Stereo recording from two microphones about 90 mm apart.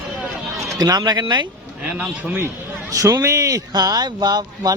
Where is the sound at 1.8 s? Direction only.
15° right (ahead or behind).